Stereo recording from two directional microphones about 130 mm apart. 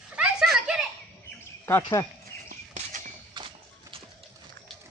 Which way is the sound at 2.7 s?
75° right (ahead or behind).